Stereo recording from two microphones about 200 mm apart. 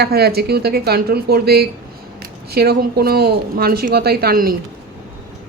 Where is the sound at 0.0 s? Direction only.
50° right (ahead or behind).